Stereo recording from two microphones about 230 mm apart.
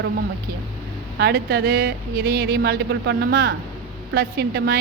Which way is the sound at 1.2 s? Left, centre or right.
Right.